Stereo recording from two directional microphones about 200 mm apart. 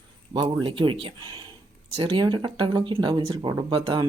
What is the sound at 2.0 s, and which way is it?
Speech, 25° right (ahead or behind).